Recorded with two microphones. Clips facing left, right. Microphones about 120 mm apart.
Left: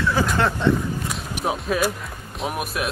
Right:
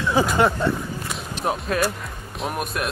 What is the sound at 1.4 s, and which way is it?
Speech, 5° left (ahead or behind).